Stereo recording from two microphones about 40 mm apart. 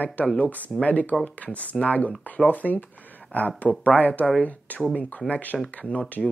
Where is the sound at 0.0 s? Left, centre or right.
Left.